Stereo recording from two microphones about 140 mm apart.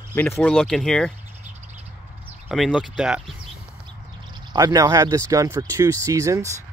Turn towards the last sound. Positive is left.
turn(degrees=-25)  # may be behind; listen again after turning